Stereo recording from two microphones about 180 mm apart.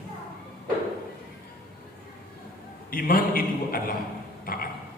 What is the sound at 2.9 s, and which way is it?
Speech, 50° left (ahead or behind).